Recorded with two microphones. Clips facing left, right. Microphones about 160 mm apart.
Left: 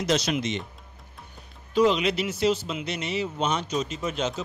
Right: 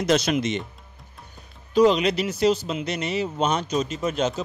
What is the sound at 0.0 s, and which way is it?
Speech, 55° right (ahead or behind).